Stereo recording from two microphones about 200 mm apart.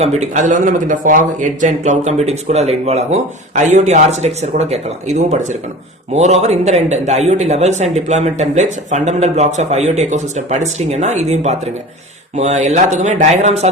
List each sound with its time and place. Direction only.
0.0 s a man's voice: 35° right (ahead or behind)